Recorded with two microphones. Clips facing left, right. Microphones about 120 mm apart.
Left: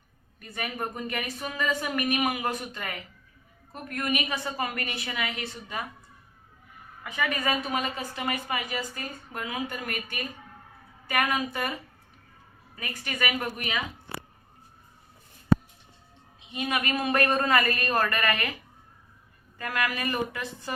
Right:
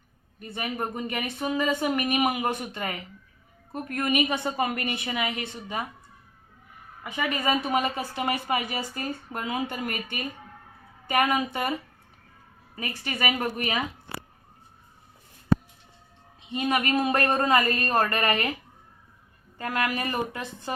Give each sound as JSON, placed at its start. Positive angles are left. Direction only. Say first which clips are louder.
{"t": 0.3, "sound": "a woman's voice", "louder": "right 3 dB", "side_deg": -25}
{"t": 7.0, "sound": "a woman's voice", "louder": "right 1 dB", "side_deg": -25}
{"t": 12.7, "sound": "a woman's voice", "louder": "right 3 dB", "side_deg": -30}
{"t": 16.6, "sound": "a woman's voice", "louder": "right 4 dB", "side_deg": -30}
{"t": 19.5, "sound": "a woman's voice", "louder": "right 2 dB", "side_deg": -30}